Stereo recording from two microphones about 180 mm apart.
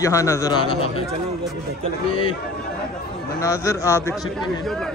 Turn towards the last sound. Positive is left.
turn(degrees=15)  # may be behind; listen again after turning